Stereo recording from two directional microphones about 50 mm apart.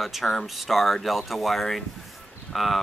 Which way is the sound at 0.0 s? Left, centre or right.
Centre.